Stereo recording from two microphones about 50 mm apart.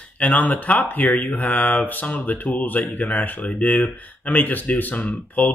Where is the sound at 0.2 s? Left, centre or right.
Left.